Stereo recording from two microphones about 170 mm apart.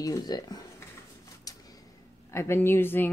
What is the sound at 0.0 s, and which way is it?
Speech, 20° left (ahead or behind).